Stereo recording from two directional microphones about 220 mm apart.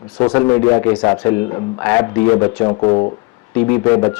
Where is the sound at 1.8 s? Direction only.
10° left (ahead or behind).